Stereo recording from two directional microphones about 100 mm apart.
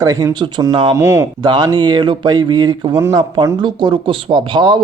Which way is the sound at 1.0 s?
25° right (ahead or behind).